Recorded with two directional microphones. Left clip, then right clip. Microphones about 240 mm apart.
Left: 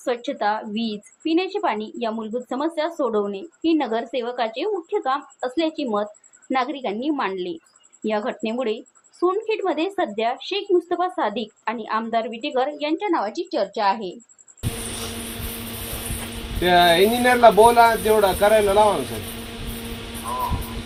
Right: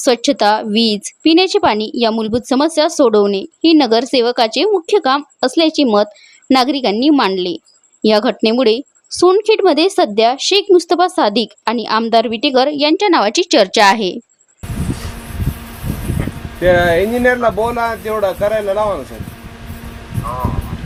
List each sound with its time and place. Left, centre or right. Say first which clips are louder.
0.0 s a woman's voice: right 11 dB; right
16.6 s speech: right 4 dB; centre